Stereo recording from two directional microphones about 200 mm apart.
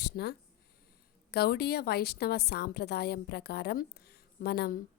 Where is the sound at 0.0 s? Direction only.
55° left (ahead or behind).